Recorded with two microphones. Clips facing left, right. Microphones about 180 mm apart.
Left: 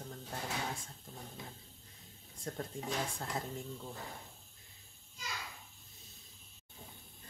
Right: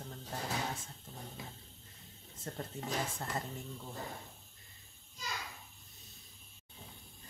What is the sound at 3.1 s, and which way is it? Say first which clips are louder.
Speech: even; centre (ahead or behind).